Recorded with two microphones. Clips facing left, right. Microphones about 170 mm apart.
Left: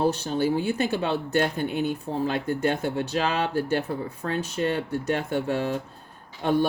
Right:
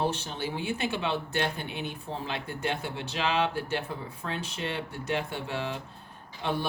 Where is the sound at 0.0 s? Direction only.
40° left (ahead or behind).